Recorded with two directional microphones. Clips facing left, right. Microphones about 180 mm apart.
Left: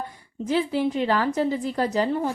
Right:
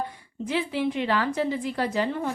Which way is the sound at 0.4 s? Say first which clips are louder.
Left 3 dB; 40° left (ahead or behind).